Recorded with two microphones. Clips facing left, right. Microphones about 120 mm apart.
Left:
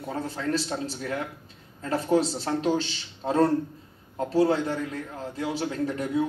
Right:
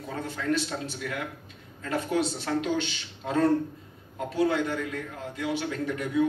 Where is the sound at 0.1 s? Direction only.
35° left (ahead or behind).